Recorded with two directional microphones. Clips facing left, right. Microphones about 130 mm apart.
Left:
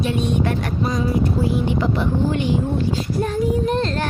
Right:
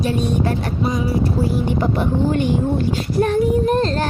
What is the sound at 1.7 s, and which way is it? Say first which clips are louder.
Speech: right 1 dB; 45° right (ahead or behind).